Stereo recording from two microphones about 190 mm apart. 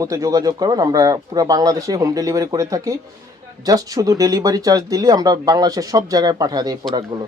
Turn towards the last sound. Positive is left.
turn(degrees=-20)  # may be behind; listen again after turning